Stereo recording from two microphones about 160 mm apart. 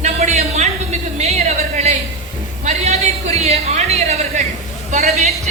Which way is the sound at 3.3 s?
40° right (ahead or behind).